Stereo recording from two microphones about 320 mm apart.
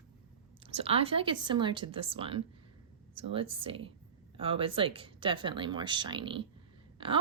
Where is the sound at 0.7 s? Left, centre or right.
Centre.